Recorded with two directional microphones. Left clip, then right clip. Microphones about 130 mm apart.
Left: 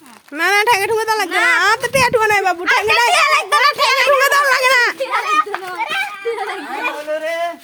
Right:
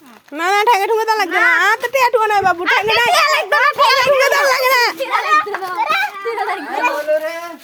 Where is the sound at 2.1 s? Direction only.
25° left (ahead or behind).